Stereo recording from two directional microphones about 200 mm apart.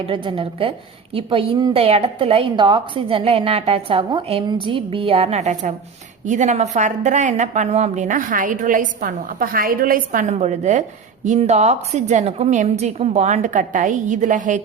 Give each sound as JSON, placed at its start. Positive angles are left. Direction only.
{"t": 0.0, "sound": "a woman's voice", "side_deg": -25}